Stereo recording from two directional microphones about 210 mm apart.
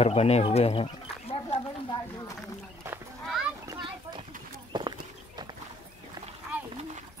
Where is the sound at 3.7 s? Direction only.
25° right (ahead or behind).